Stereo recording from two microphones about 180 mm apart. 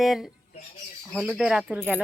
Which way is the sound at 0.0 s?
Centre (ahead or behind).